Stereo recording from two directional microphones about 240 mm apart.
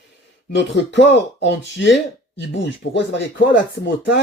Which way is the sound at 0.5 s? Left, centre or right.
Left.